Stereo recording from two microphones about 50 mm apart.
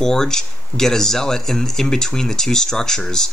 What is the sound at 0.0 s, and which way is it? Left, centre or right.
Speech, centre.